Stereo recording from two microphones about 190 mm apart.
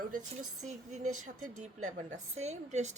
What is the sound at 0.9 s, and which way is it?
A woman's voice, 40° right (ahead or behind).